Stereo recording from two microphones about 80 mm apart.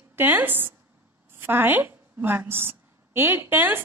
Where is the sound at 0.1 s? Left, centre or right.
Right.